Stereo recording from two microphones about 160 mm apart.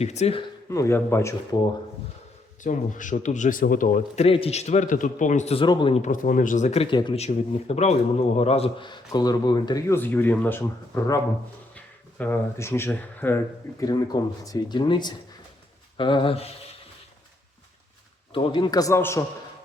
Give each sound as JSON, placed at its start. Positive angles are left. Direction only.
{"t": 0.0, "sound": "speech", "side_deg": 45}
{"t": 0.7, "sound": "speech", "side_deg": 15}
{"t": 2.6, "sound": "a man's voice", "side_deg": 55}
{"t": 5.6, "sound": "a man's voice", "side_deg": 30}
{"t": 6.0, "sound": "a man's voice", "side_deg": 55}
{"t": 6.9, "sound": "a man's voice", "side_deg": 30}
{"t": 7.2, "sound": "a man's voice", "side_deg": 40}
{"t": 9.9, "sound": "speech", "side_deg": 10}
{"t": 18.3, "sound": "a man's voice", "side_deg": 30}